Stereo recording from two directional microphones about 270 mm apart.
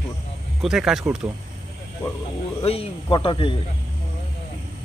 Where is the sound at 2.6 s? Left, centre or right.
Left.